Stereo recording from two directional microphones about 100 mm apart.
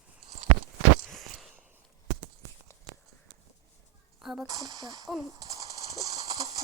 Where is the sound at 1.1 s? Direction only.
Centre (ahead or behind).